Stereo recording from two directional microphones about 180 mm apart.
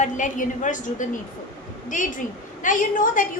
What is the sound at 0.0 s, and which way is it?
A woman's voice, 45° left (ahead or behind).